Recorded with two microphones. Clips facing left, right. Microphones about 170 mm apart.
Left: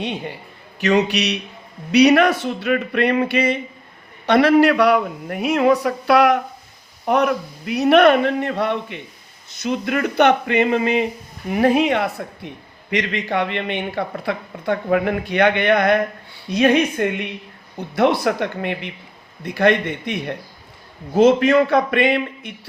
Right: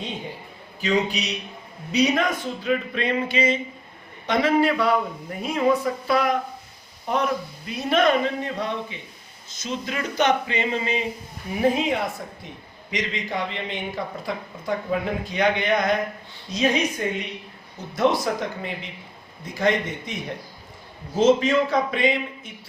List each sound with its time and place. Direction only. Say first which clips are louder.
0.0 s a man's voice: left 6 dB; 70° left (ahead or behind)
11.5 s speech: left 5 dB; 75° left (ahead or behind)